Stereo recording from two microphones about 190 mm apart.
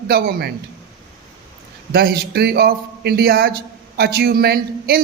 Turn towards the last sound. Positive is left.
turn(degrees=-55)  # may be behind; listen again after turning